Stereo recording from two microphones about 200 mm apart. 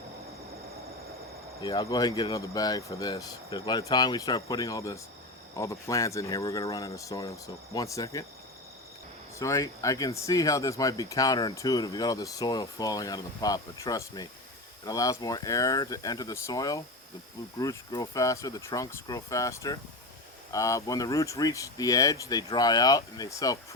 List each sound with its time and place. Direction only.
1.6 s speech: 20° left (ahead or behind)
9.4 s speech: 15° left (ahead or behind)